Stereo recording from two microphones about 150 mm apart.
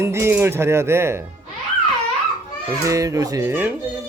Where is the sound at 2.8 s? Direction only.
20° right (ahead or behind).